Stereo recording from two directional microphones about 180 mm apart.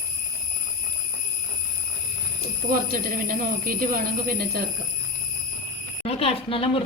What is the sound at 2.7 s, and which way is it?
Speech, 50° right (ahead or behind).